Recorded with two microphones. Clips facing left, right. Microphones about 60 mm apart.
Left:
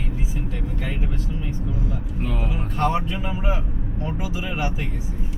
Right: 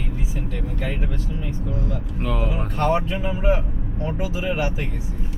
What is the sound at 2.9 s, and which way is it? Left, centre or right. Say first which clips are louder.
Speech: right 2 dB; centre.